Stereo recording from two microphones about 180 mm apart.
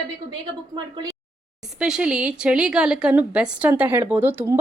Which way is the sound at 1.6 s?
5° right (ahead or behind).